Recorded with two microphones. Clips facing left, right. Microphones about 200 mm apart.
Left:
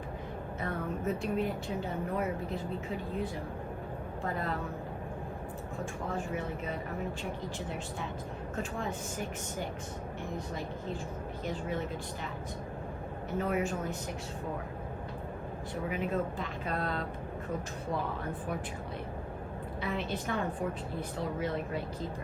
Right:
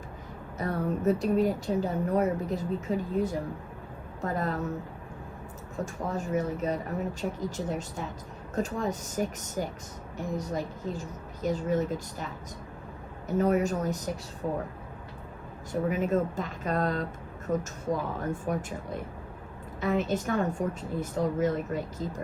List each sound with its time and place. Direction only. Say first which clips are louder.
0.6 s a woman's voice: right 7 dB; 40° right (ahead or behind)
5.8 s a woman's voice: right 4 dB; 40° right (ahead or behind)
13.4 s a woman's voice: right 7 dB; 40° right (ahead or behind)
15.7 s speech: right 7 dB; 45° right (ahead or behind)